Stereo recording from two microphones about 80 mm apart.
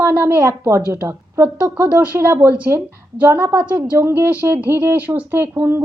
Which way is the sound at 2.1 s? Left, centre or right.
Right.